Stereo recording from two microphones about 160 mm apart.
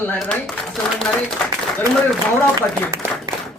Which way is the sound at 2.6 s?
20° right (ahead or behind).